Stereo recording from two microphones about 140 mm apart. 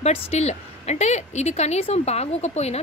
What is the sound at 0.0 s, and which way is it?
A woman's voice, 50° left (ahead or behind).